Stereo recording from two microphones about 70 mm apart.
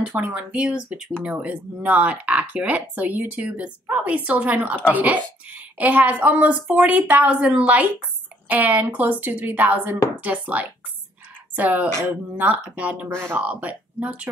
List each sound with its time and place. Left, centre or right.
0.1 s speech: centre